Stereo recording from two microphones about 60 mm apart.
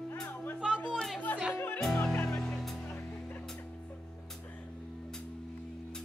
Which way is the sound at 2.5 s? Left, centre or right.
Centre.